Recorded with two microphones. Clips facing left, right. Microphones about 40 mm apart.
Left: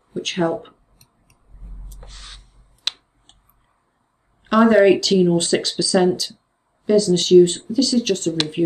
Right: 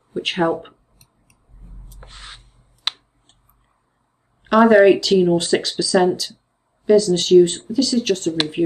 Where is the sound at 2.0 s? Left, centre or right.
Right.